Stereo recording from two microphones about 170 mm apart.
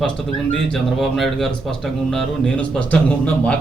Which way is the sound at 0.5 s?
Centre (ahead or behind).